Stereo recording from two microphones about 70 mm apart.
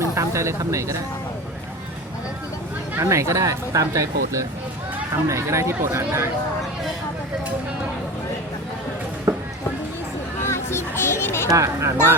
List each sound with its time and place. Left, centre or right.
0.1 s speech: right
3.0 s speech: right
9.3 s a sound: right
10.5 s music: left
11.4 s speech: right